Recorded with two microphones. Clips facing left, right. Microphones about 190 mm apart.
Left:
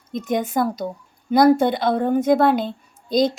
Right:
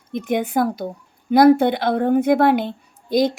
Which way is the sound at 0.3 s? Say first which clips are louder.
Right 1 dB; 60° right (ahead or behind).